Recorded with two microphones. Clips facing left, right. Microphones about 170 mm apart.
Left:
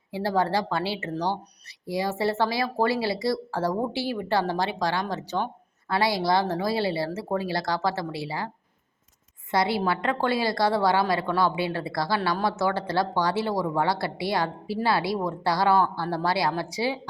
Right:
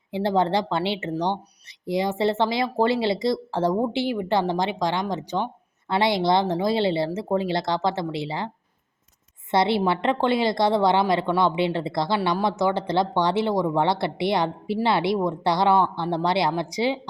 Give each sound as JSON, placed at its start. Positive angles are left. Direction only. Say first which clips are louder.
{"t": 0.1, "sound": "a woman's voice", "louder": "right 3 dB", "side_deg": -20}
{"t": 9.5, "sound": "a woman's voice", "louder": "right 3 dB", "side_deg": -25}